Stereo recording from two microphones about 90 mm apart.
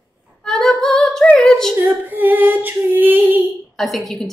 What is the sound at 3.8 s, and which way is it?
Speech, centre (ahead or behind).